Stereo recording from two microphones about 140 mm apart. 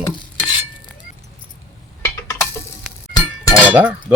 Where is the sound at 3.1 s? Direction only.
25° left (ahead or behind).